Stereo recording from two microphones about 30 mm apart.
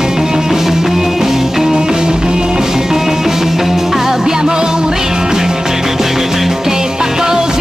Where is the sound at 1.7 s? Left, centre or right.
Right.